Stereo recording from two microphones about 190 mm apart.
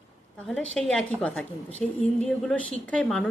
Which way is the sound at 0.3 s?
5° left (ahead or behind).